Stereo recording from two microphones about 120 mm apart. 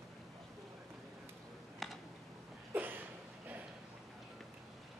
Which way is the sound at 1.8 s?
Centre (ahead or behind).